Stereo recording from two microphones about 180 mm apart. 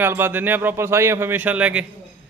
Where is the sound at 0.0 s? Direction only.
10° right (ahead or behind).